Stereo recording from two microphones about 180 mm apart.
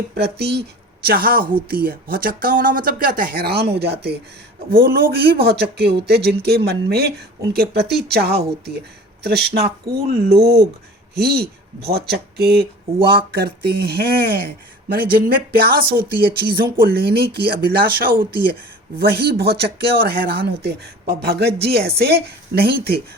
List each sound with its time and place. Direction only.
0.1 s speech: 65° right (ahead or behind)